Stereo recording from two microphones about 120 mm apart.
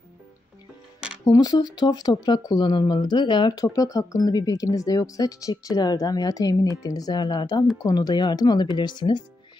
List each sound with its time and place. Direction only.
1.2 s speech: 30° left (ahead or behind)